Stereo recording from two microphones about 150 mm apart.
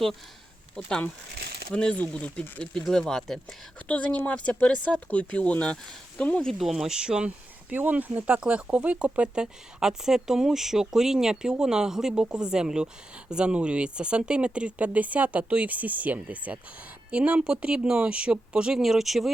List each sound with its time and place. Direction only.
0.8 s speech: 5° left (ahead or behind)
1.4 s a sound: 90° right
1.7 s speech: 5° left (ahead or behind)